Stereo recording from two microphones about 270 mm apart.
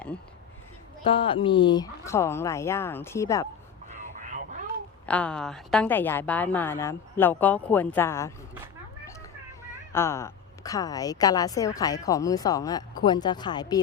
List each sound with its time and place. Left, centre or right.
1.0 s a woman's voice: centre
4.1 s a sound: right
5.0 s a woman's voice: centre
9.9 s a woman's voice: centre